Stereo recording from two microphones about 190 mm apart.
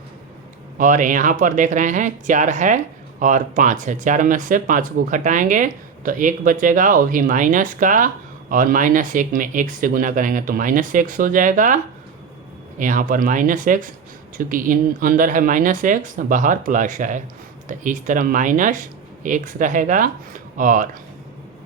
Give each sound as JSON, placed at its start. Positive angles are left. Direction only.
{"t": 0.8, "sound": "speech", "side_deg": -45}
{"t": 12.8, "sound": "speech", "side_deg": -45}